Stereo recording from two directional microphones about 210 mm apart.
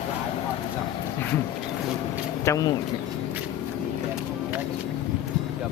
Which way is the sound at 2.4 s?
15° left (ahead or behind).